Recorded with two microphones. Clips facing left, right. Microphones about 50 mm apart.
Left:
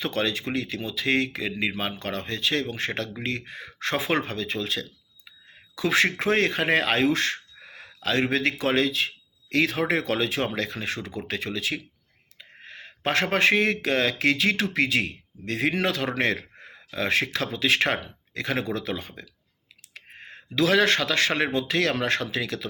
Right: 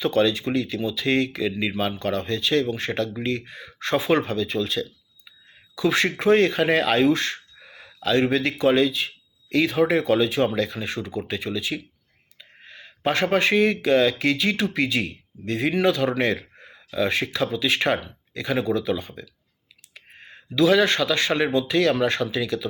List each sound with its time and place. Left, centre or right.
0.0 s speech: left